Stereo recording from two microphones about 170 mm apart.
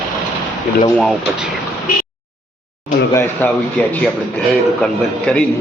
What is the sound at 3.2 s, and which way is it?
Speech, 10° left (ahead or behind).